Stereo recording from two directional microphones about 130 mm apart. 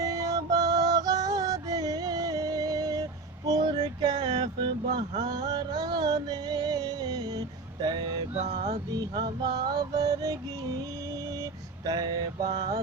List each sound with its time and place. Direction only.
0.0 s music: 25° right (ahead or behind)
8.4 s music: 55° right (ahead or behind)
8.9 s music: 30° right (ahead or behind)
11.9 s mantra: 30° right (ahead or behind)